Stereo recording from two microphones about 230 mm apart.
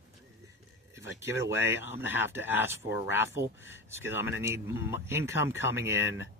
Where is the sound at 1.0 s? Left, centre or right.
Left.